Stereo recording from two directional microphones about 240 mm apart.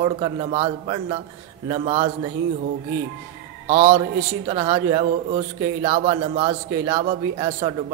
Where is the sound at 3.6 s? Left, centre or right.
Right.